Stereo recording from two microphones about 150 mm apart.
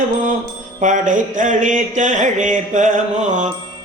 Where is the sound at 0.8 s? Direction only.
55° right (ahead or behind).